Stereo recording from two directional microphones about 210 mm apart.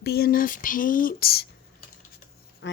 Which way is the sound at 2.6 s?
60° left (ahead or behind).